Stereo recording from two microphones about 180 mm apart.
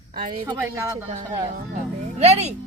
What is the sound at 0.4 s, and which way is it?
Speech, 15° right (ahead or behind).